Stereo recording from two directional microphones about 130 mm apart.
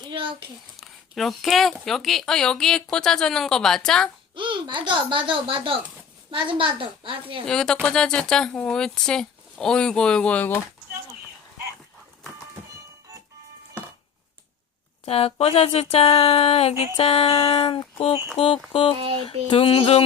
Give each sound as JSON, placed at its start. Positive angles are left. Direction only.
{"t": 0.1, "sound": "a sound", "side_deg": -40}
{"t": 0.8, "sound": "a sound", "side_deg": 0}
{"t": 1.8, "sound": "speech", "side_deg": 0}
{"t": 4.4, "sound": "a woman's voice", "side_deg": -40}
{"t": 7.4, "sound": "speech", "side_deg": 5}
{"t": 15.0, "sound": "speech", "side_deg": 50}
{"t": 18.9, "sound": "a woman's voice", "side_deg": -50}
{"t": 19.2, "sound": "speech", "side_deg": 45}